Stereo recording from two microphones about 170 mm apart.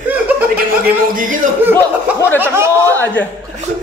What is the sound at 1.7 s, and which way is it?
Speech, 10° left (ahead or behind).